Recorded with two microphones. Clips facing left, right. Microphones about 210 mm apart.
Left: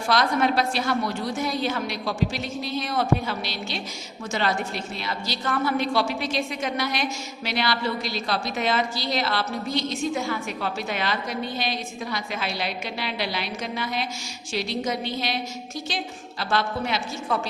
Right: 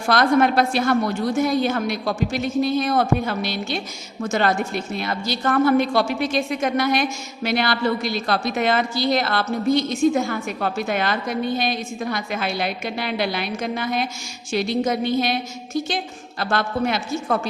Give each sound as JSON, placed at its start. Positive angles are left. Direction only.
{"t": 0.1, "sound": "a woman's voice", "side_deg": -55}